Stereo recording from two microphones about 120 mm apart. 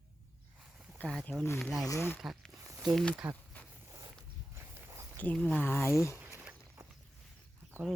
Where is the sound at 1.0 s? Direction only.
10° left (ahead or behind).